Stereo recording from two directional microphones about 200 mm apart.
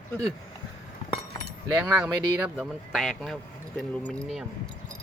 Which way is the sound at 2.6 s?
Centre (ahead or behind).